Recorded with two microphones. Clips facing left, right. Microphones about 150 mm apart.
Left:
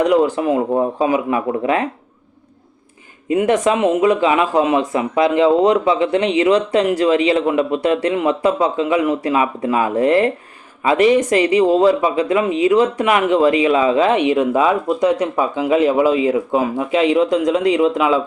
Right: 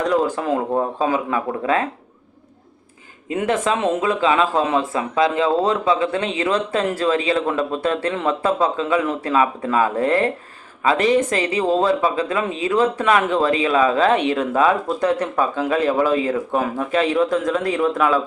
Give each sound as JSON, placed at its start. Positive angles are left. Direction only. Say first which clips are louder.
{"t": 0.4, "sound": "speech", "louder": "left 4 dB", "side_deg": 15}
{"t": 3.2, "sound": "speech", "louder": "left 5 dB", "side_deg": 15}